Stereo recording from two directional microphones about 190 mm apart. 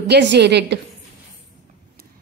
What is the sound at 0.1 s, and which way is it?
Speech, 65° right (ahead or behind).